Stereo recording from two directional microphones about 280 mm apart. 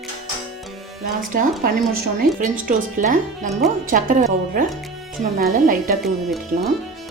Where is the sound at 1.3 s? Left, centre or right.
Right.